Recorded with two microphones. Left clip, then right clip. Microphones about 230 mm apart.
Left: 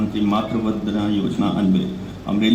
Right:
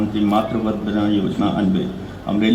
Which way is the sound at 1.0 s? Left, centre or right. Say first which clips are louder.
Right 4 dB; left.